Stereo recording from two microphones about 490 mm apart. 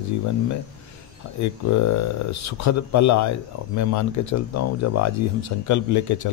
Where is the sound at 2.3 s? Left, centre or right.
Left.